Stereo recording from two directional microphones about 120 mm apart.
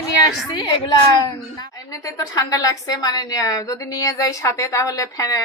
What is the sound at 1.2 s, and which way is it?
A woman's voice, 35° left (ahead or behind).